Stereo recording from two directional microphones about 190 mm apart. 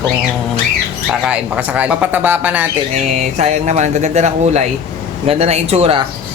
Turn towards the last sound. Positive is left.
turn(degrees=-30)  # may be behind; listen again after turning